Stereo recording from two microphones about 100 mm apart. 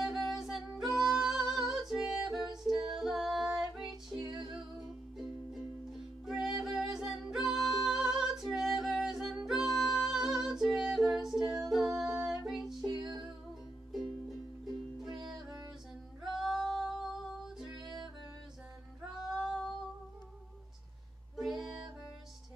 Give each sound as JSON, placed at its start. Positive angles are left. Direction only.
{"t": 0.0, "sound": "music", "side_deg": 0}
{"t": 6.2, "sound": "music", "side_deg": -5}
{"t": 12.8, "sound": "music", "side_deg": -45}
{"t": 16.3, "sound": "singing", "side_deg": 0}
{"t": 19.1, "sound": "female singing", "side_deg": -5}
{"t": 21.4, "sound": "music", "side_deg": 0}